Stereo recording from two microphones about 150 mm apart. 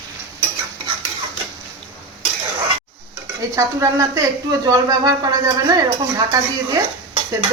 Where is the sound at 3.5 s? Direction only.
20° right (ahead or behind).